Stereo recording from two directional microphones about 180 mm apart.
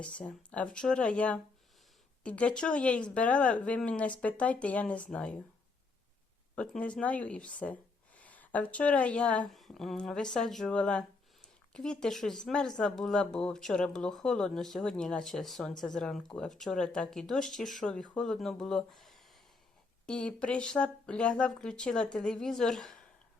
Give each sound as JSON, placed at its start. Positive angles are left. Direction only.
{"t": 0.0, "sound": "speech", "side_deg": 5}
{"t": 6.6, "sound": "speech", "side_deg": 5}